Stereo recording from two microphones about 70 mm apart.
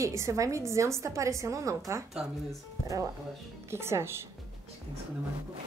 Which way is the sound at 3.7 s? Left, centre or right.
Right.